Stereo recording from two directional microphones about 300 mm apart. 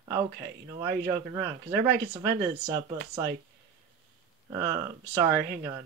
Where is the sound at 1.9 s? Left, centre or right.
Right.